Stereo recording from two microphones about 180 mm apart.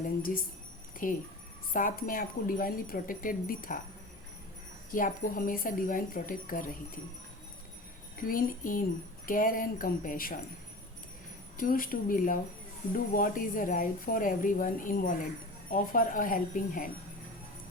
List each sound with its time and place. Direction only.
0.2 s speech: 55° left (ahead or behind)
4.9 s speech: 50° left (ahead or behind)
8.3 s speech: 50° left (ahead or behind)
11.5 s speech: 50° left (ahead or behind)